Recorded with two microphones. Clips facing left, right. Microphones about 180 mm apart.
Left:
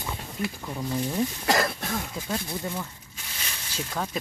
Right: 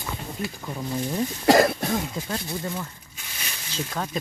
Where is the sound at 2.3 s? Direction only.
Centre (ahead or behind).